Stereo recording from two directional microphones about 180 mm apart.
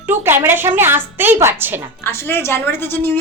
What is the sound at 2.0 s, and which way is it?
A woman's voice, 15° left (ahead or behind).